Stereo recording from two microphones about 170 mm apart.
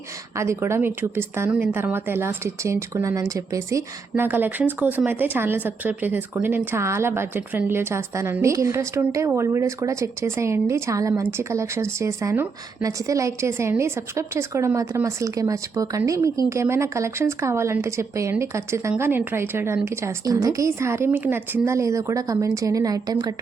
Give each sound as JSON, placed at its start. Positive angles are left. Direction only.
{"t": 0.3, "sound": "speech", "side_deg": -15}